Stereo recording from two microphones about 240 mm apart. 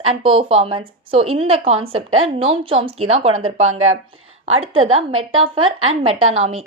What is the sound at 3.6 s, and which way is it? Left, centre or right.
Speech, right.